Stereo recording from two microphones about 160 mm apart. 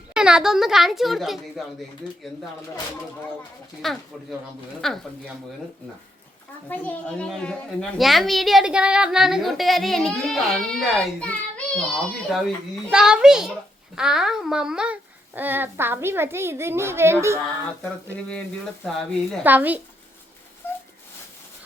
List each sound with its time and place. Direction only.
0.1 s a woman's voice: 5° right (ahead or behind)
3.8 s a woman's voice: centre (ahead or behind)
6.7 s a woman's voice: 10° left (ahead or behind); by 17.4 s 15° right (ahead or behind)
19.4 s a woman's voice: 10° right (ahead or behind)
20.6 s a sound: 15° left (ahead or behind)